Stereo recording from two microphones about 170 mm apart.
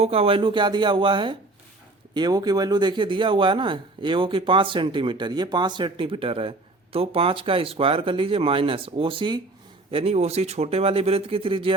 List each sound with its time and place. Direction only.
0.0 s speech: 35° right (ahead or behind)